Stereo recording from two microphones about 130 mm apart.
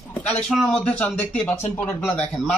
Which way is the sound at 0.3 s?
5° left (ahead or behind).